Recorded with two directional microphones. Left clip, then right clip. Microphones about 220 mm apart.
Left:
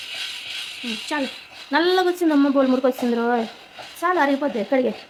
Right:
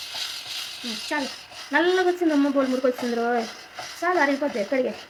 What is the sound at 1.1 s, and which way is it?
A woman's voice, 25° left (ahead or behind).